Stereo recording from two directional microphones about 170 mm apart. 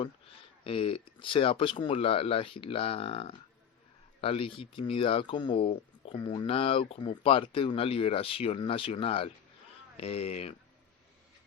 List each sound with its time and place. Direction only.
0.6 s speech: 30° left (ahead or behind)